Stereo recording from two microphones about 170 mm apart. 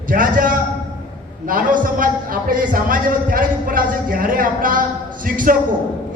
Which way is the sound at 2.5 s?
55° right (ahead or behind).